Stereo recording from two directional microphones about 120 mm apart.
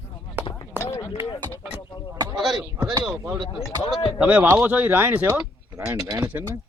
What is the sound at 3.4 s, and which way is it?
Speech, centre (ahead or behind).